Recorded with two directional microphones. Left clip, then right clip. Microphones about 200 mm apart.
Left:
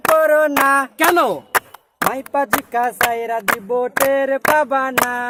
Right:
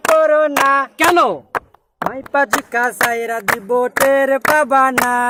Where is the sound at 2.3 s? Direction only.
20° right (ahead or behind); by 5.3 s 55° right (ahead or behind).